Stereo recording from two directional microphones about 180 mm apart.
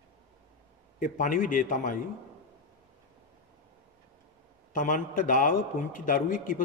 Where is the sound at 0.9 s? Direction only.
50° left (ahead or behind).